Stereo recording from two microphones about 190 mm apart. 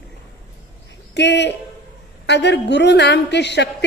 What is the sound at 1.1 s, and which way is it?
A woman's voice, 65° left (ahead or behind).